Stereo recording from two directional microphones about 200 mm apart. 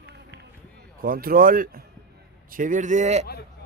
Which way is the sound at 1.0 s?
45° right (ahead or behind).